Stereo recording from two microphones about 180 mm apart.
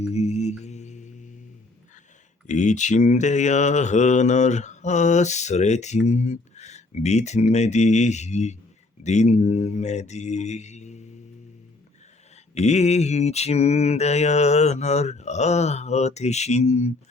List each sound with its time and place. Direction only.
0.0 s mantra: 35° left (ahead or behind)
0.6 s music: 40° left (ahead or behind)
2.5 s mantra: 40° left (ahead or behind)
12.5 s mantra: 40° left (ahead or behind)